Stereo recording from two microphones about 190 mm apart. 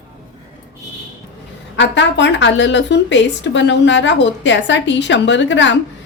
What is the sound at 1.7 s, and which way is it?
A woman's voice, 70° left (ahead or behind).